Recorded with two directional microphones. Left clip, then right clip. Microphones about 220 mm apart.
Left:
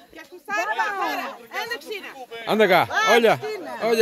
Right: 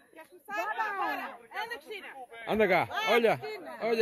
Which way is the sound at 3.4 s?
25° left (ahead or behind).